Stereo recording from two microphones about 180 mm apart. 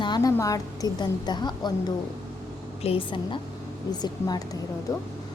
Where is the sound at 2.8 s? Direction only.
30° left (ahead or behind).